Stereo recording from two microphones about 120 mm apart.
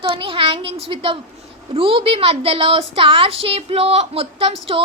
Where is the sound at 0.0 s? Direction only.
45° right (ahead or behind).